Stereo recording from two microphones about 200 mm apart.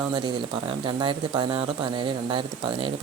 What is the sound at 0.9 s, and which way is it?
Speech, 20° right (ahead or behind).